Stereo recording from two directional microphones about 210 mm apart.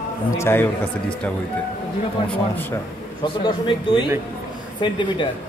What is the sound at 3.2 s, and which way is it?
Speech, 20° left (ahead or behind).